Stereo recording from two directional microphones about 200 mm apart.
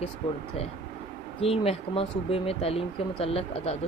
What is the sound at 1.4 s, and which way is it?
Speech, 30° left (ahead or behind).